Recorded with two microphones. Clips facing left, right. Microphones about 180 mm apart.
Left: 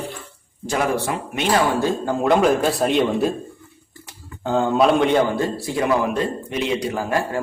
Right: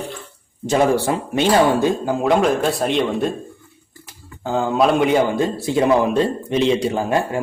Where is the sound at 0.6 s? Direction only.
25° right (ahead or behind).